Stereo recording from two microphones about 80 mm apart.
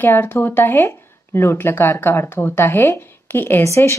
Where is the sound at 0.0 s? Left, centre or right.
Left.